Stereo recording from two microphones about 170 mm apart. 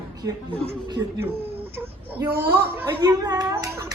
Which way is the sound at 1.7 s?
10° right (ahead or behind).